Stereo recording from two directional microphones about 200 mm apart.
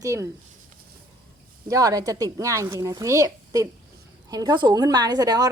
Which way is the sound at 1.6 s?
15° right (ahead or behind).